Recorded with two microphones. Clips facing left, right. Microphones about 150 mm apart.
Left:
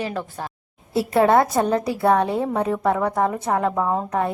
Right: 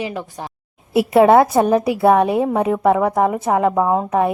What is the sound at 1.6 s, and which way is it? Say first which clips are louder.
A woman's voice: right 5 dB; 20° right (ahead or behind).